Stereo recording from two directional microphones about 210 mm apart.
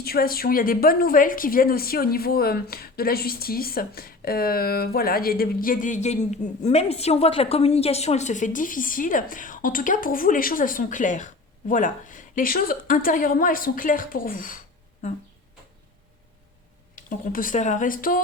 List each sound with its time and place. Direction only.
0.0 s a woman's voice: 45° left (ahead or behind)
16.9 s a woman's voice: 40° left (ahead or behind)